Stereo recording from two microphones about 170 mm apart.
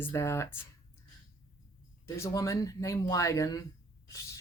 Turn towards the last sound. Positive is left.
turn(degrees=15)  # may be behind; listen again after turning